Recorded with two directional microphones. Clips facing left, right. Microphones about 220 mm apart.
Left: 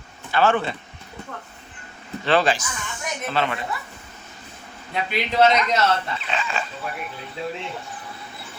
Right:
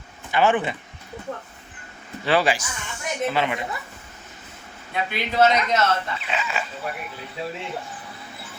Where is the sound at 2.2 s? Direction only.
10° right (ahead or behind).